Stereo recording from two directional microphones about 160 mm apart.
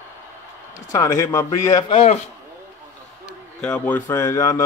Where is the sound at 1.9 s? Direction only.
40° left (ahead or behind).